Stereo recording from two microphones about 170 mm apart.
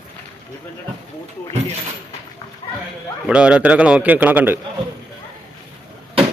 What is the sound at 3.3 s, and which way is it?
A man's voice, 5° right (ahead or behind).